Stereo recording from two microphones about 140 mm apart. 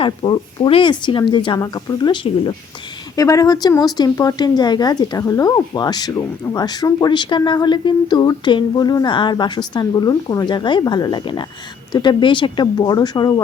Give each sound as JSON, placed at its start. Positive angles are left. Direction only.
{"t": 0.0, "sound": "speech", "side_deg": 35}